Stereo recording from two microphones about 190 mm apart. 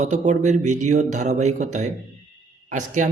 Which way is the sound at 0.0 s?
40° right (ahead or behind).